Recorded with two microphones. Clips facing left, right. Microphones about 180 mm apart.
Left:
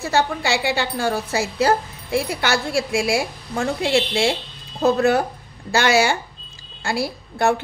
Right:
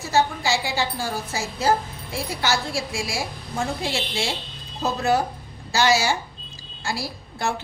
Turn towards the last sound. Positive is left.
turn(degrees=60)  # may be behind; listen again after turning